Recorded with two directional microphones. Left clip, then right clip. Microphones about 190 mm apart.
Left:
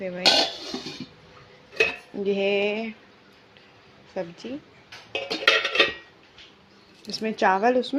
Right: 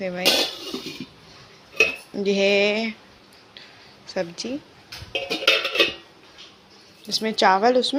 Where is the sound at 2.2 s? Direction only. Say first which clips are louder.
Right 4 dB; centre (ahead or behind).